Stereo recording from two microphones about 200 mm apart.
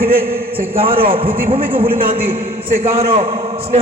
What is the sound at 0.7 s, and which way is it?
Speech, 25° right (ahead or behind).